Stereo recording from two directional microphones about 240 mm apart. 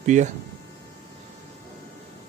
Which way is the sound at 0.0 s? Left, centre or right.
Right.